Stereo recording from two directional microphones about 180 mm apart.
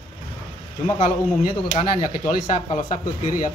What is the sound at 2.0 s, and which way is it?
Speech, 50° left (ahead or behind).